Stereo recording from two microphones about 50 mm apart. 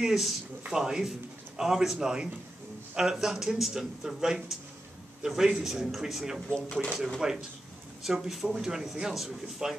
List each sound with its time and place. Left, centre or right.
0.0 s speech: centre
6.5 s speech: centre
7.2 s speech: centre